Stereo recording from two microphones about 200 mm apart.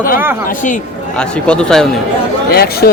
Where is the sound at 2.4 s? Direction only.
50° left (ahead or behind).